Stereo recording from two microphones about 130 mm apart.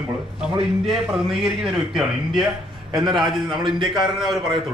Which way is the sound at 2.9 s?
35° right (ahead or behind).